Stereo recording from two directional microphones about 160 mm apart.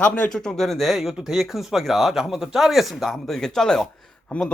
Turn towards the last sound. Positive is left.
turn(degrees=5)  # may be behind; listen again after turning